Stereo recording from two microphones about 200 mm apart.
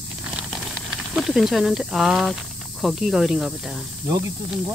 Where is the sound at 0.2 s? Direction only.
5° right (ahead or behind).